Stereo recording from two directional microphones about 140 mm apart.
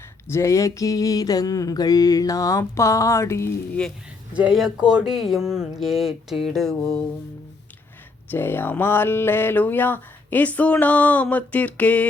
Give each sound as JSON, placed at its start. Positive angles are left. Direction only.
{"t": 0.3, "sound": "mantra", "side_deg": 20}
{"t": 3.8, "sound": "speech", "side_deg": 5}
{"t": 4.4, "sound": "speech", "side_deg": -5}
{"t": 8.3, "sound": "speech", "side_deg": 15}